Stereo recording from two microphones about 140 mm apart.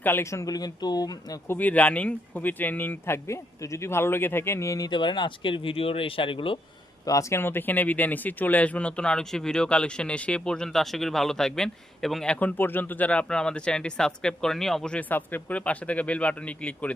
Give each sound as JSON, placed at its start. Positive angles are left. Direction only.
{"t": 0.0, "sound": "speech", "side_deg": 15}
{"t": 1.5, "sound": "speech", "side_deg": 10}
{"t": 4.9, "sound": "speech", "side_deg": 35}
{"t": 7.0, "sound": "speech", "side_deg": 25}